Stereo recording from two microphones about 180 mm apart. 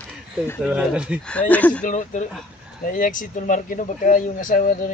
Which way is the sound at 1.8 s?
45° left (ahead or behind).